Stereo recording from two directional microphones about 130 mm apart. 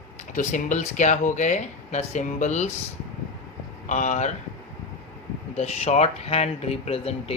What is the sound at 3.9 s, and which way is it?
Speech, 70° left (ahead or behind).